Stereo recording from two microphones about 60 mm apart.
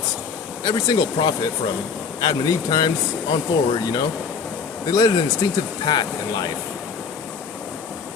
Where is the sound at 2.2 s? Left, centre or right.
Left.